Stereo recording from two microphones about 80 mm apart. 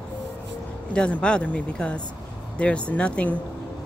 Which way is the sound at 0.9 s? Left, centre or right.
Centre.